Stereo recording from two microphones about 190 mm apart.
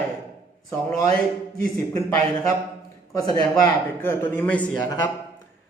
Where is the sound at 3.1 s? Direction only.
20° left (ahead or behind).